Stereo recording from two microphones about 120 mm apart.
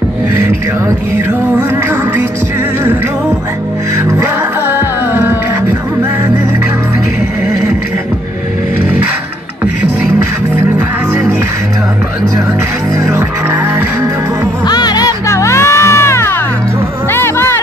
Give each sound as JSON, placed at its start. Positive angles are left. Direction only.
{"t": 4.6, "sound": "music", "side_deg": -20}
{"t": 13.0, "sound": "music", "side_deg": -20}
{"t": 14.7, "sound": "music", "side_deg": 35}